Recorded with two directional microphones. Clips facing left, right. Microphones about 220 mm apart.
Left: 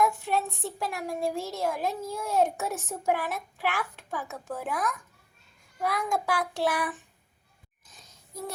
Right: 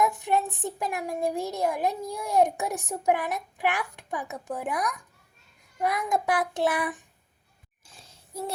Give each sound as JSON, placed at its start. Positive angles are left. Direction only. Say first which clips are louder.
{"t": 0.0, "sound": "a child's voice", "louder": "right 1 dB", "side_deg": -20}
{"t": 5.8, "sound": "child singing", "louder": "right 2 dB", "side_deg": -20}
{"t": 7.9, "sound": "a sound", "louder": "right 3 dB", "side_deg": -30}